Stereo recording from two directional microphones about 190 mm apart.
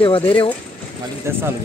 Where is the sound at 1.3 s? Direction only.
15° right (ahead or behind).